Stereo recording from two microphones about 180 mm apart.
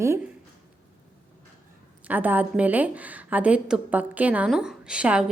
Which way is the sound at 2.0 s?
10° right (ahead or behind).